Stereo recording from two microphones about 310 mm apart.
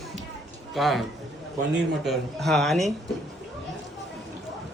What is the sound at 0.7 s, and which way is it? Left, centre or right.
A man's voice, centre.